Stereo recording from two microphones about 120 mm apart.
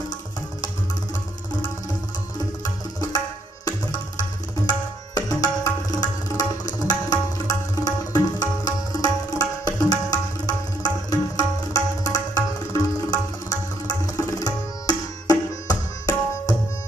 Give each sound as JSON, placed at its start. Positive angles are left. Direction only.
{"t": 2.3, "sound": "music", "side_deg": 30}
{"t": 4.2, "sound": "tabla", "side_deg": 30}